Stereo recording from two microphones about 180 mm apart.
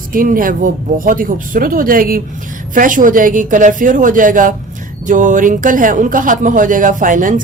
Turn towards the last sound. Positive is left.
turn(degrees=-45)  # may be behind; listen again after turning